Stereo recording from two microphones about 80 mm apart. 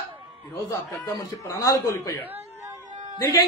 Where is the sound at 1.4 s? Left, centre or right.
Left.